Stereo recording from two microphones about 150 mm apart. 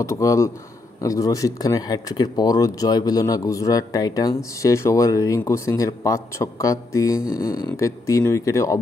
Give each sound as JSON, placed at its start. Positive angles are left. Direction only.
{"t": 0.0, "sound": "speech", "side_deg": 20}